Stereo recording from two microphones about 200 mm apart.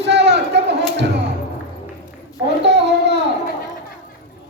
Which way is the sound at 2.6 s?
60° right (ahead or behind).